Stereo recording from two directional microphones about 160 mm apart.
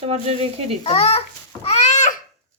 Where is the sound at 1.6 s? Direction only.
45° left (ahead or behind).